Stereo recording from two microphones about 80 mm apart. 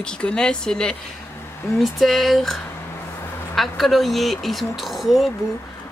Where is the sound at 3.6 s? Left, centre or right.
Centre.